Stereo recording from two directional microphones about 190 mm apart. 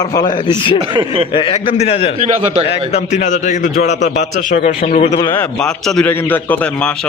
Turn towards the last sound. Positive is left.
turn(degrees=10)  # may be behind; listen again after turning